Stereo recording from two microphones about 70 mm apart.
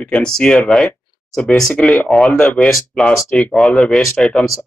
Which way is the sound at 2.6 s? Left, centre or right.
Centre.